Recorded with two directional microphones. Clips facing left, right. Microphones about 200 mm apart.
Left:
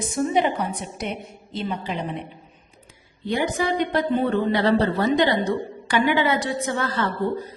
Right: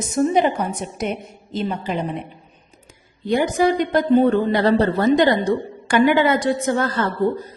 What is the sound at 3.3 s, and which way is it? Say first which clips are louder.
A woman's voice: right 5 dB; 45° right (ahead or behind).